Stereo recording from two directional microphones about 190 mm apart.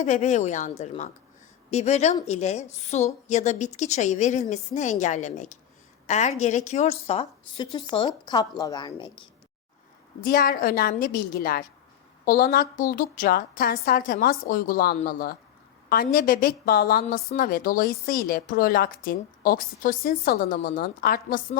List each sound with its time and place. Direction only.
0.0 s a woman's voice: 40° left (ahead or behind)
10.2 s a woman's voice: 50° left (ahead or behind)